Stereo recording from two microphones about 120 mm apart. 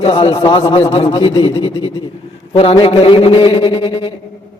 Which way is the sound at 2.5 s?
55° left (ahead or behind).